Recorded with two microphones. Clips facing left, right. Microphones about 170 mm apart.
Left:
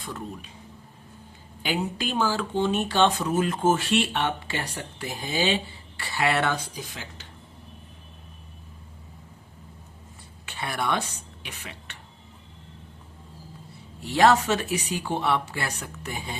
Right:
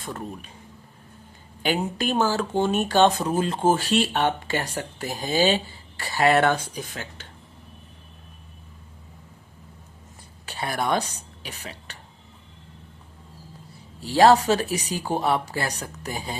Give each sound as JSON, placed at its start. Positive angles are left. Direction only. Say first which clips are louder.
{"t": 0.0, "sound": "speech", "louder": "right 2 dB", "side_deg": -50}
{"t": 1.6, "sound": "speech", "louder": "right 3 dB", "side_deg": -45}
{"t": 10.4, "sound": "a woman's voice", "louder": "right 2 dB", "side_deg": -40}
{"t": 14.0, "sound": "speech", "louder": "right 3 dB", "side_deg": -35}